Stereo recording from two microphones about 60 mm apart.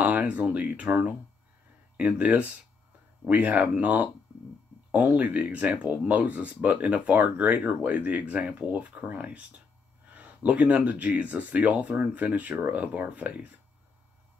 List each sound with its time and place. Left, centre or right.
0.0 s speech: right